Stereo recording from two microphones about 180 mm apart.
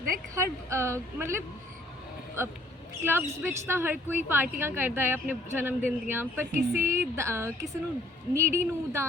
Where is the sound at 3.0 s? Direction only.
10° right (ahead or behind).